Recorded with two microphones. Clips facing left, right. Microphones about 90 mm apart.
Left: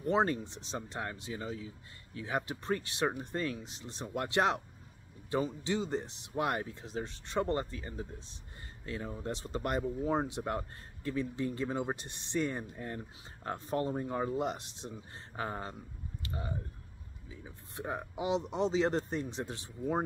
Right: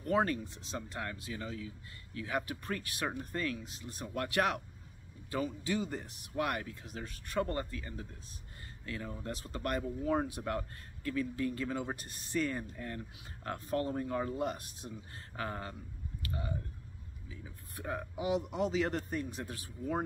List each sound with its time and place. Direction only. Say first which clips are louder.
0.0 s speech: left 1 dB; 25° left (ahead or behind)
16.2 s chewing: even; 25° left (ahead or behind)
17.3 s speech: left 1 dB; 25° left (ahead or behind)